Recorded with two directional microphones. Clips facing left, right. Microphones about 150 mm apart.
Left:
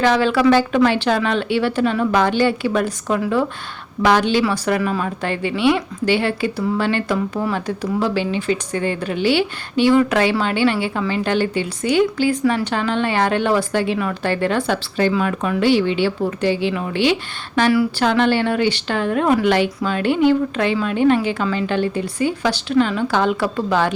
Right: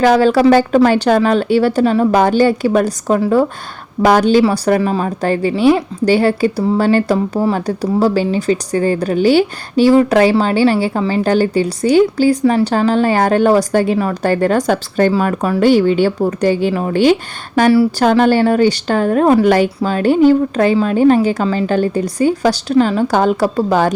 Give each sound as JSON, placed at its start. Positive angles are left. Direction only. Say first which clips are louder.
{"t": 0.0, "sound": "speech", "louder": "right 5 dB", "side_deg": -40}